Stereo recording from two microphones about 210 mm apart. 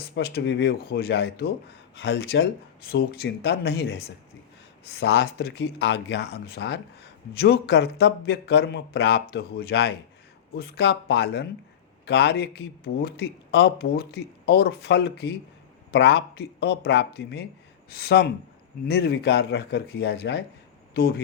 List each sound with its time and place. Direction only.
0.1 s speech: 50° left (ahead or behind)